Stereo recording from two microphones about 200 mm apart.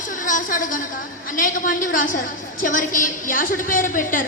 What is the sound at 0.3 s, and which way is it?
A woman's voice, 40° left (ahead or behind).